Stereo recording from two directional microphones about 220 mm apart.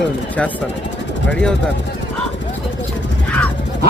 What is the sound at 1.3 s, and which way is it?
Speech, 5° left (ahead or behind).